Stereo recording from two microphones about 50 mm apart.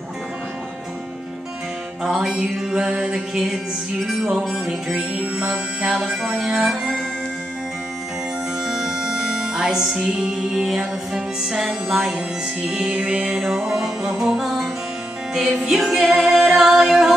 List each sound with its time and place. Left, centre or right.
2.0 s music: centre
4.5 s music: centre
8.6 s music: centre
10.0 s music: centre
15.9 s music: centre